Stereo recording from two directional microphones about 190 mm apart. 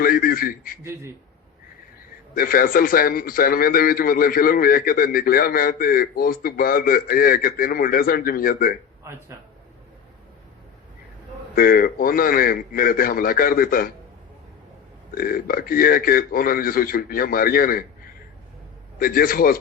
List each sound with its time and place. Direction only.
0.0 s a man's voice: 50° left (ahead or behind)
2.3 s a man's voice: 50° left (ahead or behind)
11.5 s a man's voice: 50° left (ahead or behind)
15.1 s a man's voice: 50° left (ahead or behind)
18.9 s a man's voice: 50° left (ahead or behind)